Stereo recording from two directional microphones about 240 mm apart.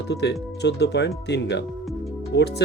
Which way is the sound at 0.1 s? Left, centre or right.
Left.